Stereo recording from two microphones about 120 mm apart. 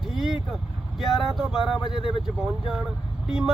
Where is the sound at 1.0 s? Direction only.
Centre (ahead or behind).